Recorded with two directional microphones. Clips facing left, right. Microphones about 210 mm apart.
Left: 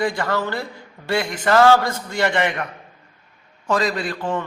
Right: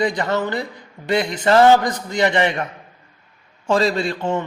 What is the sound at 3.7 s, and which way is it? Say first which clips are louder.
Speech: right 3 dB; 30° right (ahead or behind).